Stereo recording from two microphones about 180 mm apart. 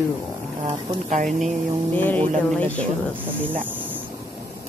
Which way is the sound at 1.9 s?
10° left (ahead or behind).